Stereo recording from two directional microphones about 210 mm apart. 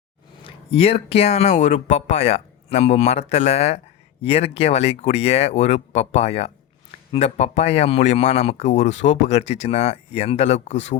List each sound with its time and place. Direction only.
0.4 s speech: 30° left (ahead or behind)